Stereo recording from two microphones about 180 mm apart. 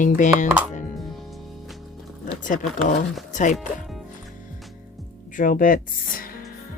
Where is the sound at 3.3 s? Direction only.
45° left (ahead or behind).